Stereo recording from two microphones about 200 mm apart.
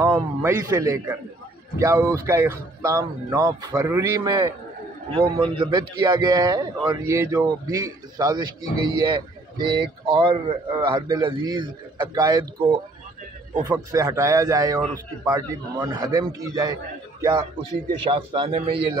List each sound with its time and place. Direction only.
0.0 s a man's voice: 10° right (ahead or behind)